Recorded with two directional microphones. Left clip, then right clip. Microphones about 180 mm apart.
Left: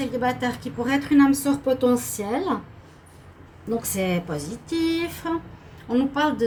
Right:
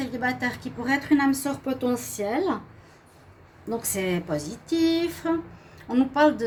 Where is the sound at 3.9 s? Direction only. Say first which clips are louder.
Right 2 dB; 50° right (ahead or behind).